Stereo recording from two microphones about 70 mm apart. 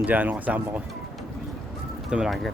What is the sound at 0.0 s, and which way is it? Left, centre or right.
Speech, right.